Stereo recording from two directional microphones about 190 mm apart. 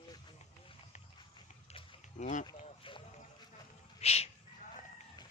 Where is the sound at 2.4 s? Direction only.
25° left (ahead or behind).